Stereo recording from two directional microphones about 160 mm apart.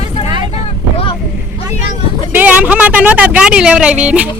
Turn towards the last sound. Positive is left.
turn(degrees=-5)  # may be behind; listen again after turning